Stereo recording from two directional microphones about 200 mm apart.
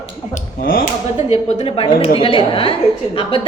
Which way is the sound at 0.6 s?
45° left (ahead or behind).